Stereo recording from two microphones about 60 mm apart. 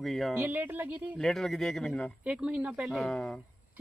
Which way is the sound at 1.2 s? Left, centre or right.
Centre.